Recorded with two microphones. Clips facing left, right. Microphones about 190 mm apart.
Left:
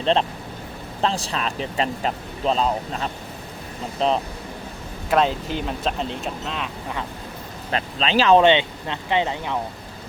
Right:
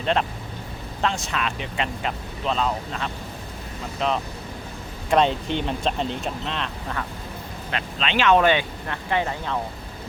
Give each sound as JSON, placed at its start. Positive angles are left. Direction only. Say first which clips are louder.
{"t": 0.0, "sound": "speech", "louder": "left 3 dB", "side_deg": 30}
{"t": 5.1, "sound": "speech", "louder": "even", "side_deg": 0}
{"t": 7.7, "sound": "speech", "louder": "left 4 dB", "side_deg": 35}